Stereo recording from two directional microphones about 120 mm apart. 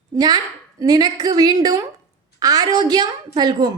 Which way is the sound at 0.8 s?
35° right (ahead or behind).